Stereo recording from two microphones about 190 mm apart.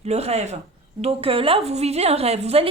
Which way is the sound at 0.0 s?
35° right (ahead or behind).